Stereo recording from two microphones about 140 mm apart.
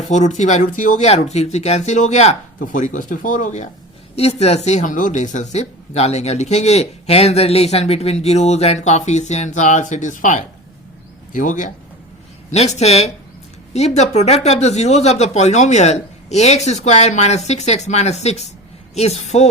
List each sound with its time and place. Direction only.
0.0 s speech: 60° left (ahead or behind)
4.1 s speech: 50° left (ahead or behind); by 11.7 s 65° left (ahead or behind)
12.5 s speech: 55° left (ahead or behind)